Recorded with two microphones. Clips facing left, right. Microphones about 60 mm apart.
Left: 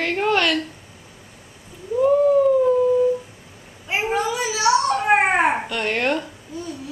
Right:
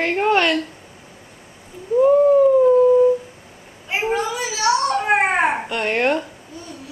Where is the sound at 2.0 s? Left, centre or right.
Centre.